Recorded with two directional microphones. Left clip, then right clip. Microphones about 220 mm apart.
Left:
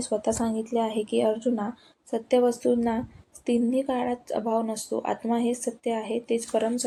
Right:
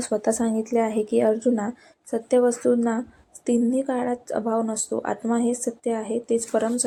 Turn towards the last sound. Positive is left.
turn(degrees=-15)  # may be behind; listen again after turning